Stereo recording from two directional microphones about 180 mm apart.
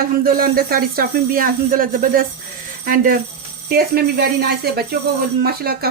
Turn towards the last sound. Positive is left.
turn(degrees=-60)  # may be behind; listen again after turning